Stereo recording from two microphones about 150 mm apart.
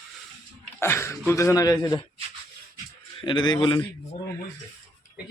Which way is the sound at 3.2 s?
30° left (ahead or behind).